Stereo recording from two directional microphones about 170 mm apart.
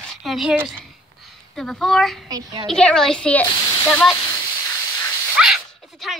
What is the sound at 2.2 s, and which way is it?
Speech, 25° right (ahead or behind).